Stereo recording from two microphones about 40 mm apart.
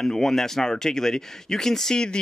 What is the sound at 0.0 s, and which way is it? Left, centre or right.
Speech, centre.